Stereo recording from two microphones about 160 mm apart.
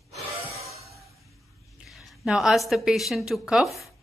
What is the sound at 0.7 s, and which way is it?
Music, 20° right (ahead or behind).